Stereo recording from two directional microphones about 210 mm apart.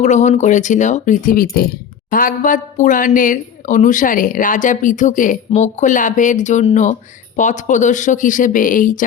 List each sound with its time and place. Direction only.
0.0 s a woman's voice: 35° left (ahead or behind)